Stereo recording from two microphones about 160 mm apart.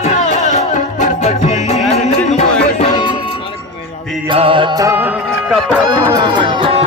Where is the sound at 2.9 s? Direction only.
30° left (ahead or behind).